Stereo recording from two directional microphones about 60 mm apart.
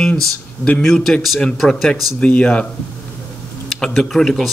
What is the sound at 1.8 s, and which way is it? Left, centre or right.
Speech, centre.